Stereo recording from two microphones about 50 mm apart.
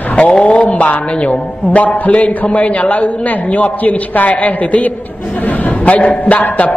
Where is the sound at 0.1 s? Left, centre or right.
Left.